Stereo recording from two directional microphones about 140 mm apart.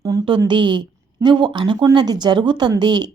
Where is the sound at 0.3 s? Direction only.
35° right (ahead or behind).